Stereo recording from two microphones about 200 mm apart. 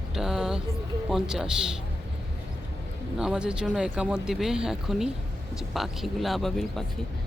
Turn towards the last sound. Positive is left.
turn(degrees=0)  # may be behind; listen again after turning